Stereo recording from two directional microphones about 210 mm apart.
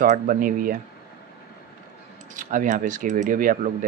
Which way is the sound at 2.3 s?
40° right (ahead or behind).